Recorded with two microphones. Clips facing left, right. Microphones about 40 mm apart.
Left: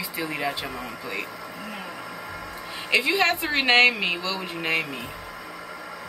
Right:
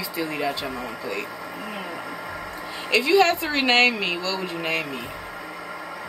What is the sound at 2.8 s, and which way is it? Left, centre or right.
A woman's voice, centre.